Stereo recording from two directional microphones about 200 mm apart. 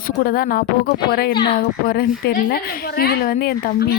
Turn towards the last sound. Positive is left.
turn(degrees=50)  # may be behind; listen again after turning